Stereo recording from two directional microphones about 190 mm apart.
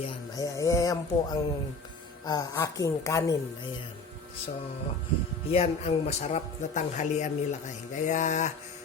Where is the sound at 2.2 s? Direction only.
20° left (ahead or behind).